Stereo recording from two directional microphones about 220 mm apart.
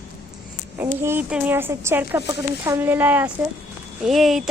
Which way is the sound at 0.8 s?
10° right (ahead or behind).